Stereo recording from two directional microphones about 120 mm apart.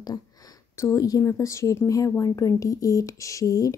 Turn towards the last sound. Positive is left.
turn(degrees=30)  # may be behind; listen again after turning